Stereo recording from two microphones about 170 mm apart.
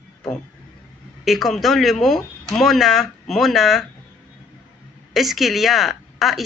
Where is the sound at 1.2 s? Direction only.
Centre (ahead or behind).